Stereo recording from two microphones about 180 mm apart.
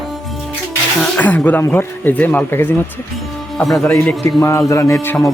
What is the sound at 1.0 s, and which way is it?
Speech, 10° left (ahead or behind).